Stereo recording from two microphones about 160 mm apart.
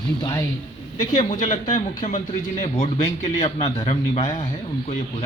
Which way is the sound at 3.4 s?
25° left (ahead or behind).